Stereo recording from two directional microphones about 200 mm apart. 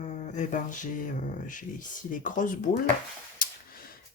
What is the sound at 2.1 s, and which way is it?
Speech, 40° left (ahead or behind).